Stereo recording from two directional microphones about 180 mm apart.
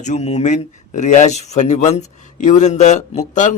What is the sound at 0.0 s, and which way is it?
Speech, 40° left (ahead or behind).